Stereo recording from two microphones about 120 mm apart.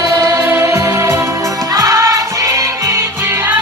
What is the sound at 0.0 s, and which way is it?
Music, 25° right (ahead or behind).